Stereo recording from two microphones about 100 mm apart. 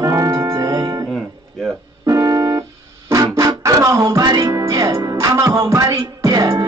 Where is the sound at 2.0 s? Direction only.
35° right (ahead or behind).